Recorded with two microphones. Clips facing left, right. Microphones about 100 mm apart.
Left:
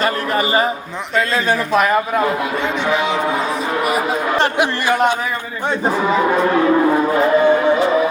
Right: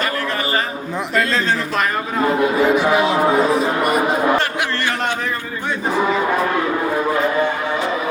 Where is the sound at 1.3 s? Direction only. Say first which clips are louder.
Left 3 dB; 10° left (ahead or behind).